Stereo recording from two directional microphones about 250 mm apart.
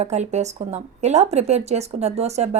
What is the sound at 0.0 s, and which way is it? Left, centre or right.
A woman's voice, right.